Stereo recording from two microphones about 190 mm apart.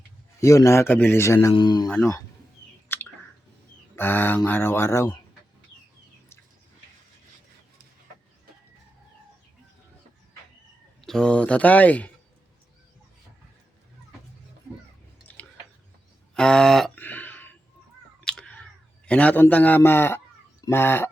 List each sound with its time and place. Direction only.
0.3 s speech: 15° left (ahead or behind)
1.9 s speech: 10° left (ahead or behind)
2.9 s a sound: 10° left (ahead or behind)
3.9 s speech: 10° left (ahead or behind)
11.0 s speech: 5° left (ahead or behind)
16.3 s a sound: 5° left (ahead or behind)
20.7 s speech: 10° left (ahead or behind)